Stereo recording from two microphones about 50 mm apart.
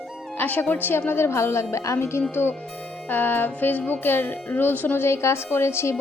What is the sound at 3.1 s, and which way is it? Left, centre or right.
Music, left.